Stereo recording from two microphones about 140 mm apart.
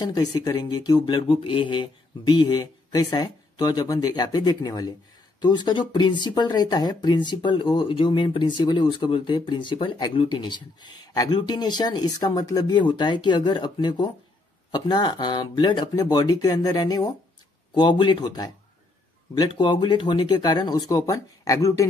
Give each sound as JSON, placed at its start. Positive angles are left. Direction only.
{"t": 0.0, "sound": "speech", "side_deg": 25}
{"t": 19.5, "sound": "speech", "side_deg": 35}